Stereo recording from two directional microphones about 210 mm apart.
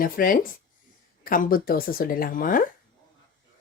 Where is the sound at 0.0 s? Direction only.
40° left (ahead or behind).